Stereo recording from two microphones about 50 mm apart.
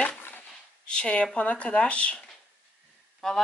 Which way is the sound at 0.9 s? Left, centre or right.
Left.